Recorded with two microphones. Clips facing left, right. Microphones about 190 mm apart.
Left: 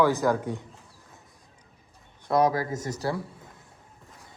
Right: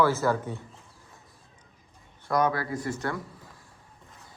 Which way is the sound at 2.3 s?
35° left (ahead or behind).